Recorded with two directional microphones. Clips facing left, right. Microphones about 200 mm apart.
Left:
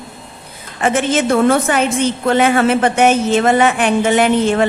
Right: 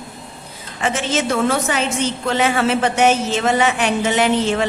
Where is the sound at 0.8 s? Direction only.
55° left (ahead or behind).